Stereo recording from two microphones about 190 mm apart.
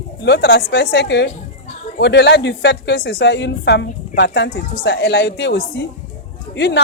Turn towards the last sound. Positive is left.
turn(degrees=65)  # may be behind; listen again after turning